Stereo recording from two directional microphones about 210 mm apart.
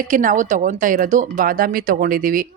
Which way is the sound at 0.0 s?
40° right (ahead or behind).